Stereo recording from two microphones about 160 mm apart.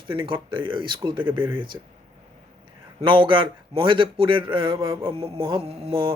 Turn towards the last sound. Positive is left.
turn(degrees=-35)  # may be behind; listen again after turning